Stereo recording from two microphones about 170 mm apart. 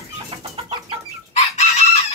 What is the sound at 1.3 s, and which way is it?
Chicken, 40° left (ahead or behind).